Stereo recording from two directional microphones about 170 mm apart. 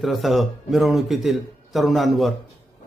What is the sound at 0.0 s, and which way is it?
A man's voice, centre (ahead or behind).